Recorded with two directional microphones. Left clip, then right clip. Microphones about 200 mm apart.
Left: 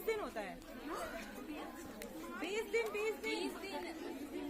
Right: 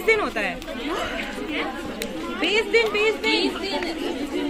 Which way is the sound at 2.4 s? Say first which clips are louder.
Right 18 dB; 55° left (ahead or behind).